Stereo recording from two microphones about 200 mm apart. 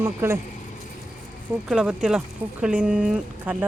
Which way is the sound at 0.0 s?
15° right (ahead or behind).